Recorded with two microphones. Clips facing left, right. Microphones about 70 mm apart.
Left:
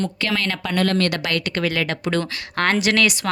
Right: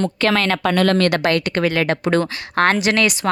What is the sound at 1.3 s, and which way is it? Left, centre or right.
Speech, right.